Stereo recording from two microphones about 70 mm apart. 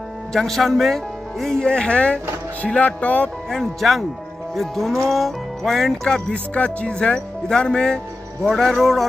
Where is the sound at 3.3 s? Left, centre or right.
Centre.